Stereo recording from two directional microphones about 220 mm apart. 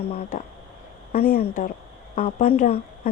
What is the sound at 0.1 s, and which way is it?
A woman's voice, 30° left (ahead or behind).